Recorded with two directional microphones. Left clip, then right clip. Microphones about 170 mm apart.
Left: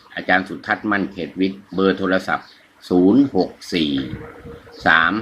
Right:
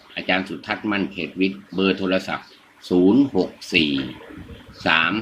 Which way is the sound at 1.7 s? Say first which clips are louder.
Left 4 dB; 15° left (ahead or behind).